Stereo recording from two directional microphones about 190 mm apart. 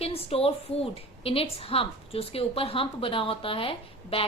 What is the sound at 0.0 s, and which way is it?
A woman's voice, 30° left (ahead or behind).